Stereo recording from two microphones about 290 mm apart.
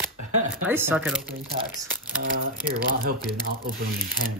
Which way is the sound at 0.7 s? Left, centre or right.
Centre.